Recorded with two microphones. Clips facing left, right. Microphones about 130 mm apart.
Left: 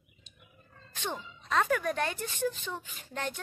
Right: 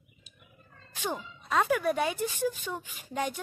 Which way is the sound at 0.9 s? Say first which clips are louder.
Right 3 dB; 10° right (ahead or behind).